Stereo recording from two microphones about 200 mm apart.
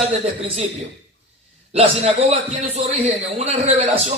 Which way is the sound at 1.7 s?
30° right (ahead or behind).